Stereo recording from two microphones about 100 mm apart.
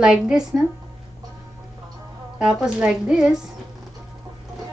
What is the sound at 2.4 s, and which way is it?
Speech, 5° right (ahead or behind).